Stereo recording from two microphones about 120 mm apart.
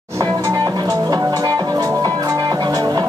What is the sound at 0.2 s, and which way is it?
Music, 25° right (ahead or behind).